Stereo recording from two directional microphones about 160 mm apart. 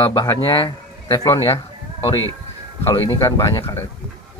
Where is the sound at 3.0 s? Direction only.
30° left (ahead or behind).